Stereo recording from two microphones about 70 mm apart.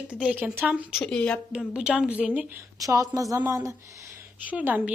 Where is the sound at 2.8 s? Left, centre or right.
Right.